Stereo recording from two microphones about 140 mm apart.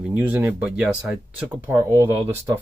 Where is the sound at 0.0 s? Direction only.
10° right (ahead or behind).